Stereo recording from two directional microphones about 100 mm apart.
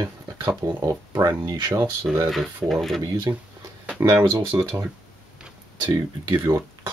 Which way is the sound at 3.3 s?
30° right (ahead or behind).